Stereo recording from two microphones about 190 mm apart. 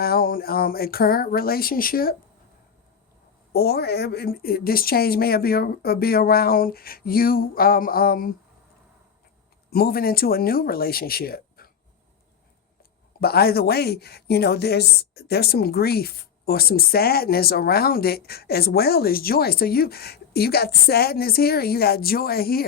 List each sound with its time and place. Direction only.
0.0 s speech: 50° left (ahead or behind)
3.5 s speech: 55° left (ahead or behind)
9.6 s speech: 55° left (ahead or behind)
13.1 s speech: 55° left (ahead or behind)